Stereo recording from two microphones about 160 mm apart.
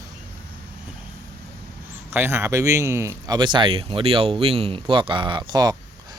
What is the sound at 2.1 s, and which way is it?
Speech, 15° right (ahead or behind).